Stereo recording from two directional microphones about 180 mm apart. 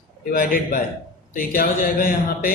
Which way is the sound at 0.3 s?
50° left (ahead or behind).